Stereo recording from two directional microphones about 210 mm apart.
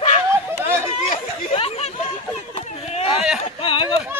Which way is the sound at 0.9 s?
25° left (ahead or behind).